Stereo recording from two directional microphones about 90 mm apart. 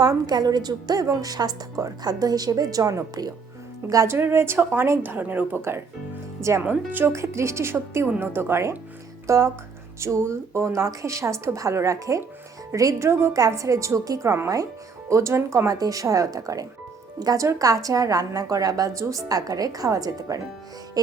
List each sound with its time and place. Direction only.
0.0 s a woman's voice: 45° right (ahead or behind)
4.1 s a woman's voice: 25° right (ahead or behind)
13.3 s a woman's voice: 40° right (ahead or behind)